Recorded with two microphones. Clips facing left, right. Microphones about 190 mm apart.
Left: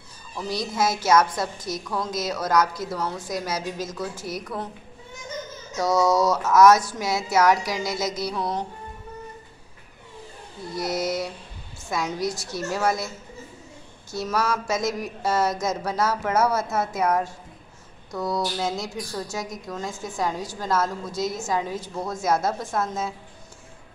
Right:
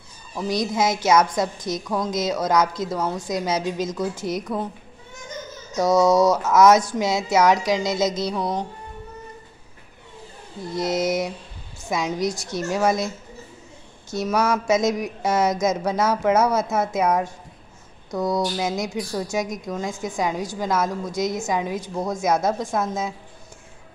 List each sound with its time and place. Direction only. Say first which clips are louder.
0.4 s a woman's voice: right 3 dB; 15° right (ahead or behind)
5.8 s speech: right 4 dB; 20° right (ahead or behind)
10.7 s a woman's voice: right 4 dB; 20° right (ahead or behind)
14.1 s a woman's voice: right 4 dB; 20° right (ahead or behind)